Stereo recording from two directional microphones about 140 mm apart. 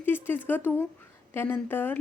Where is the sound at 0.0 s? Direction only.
15° left (ahead or behind).